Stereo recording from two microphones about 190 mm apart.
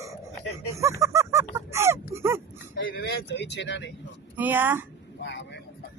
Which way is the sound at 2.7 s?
55° left (ahead or behind).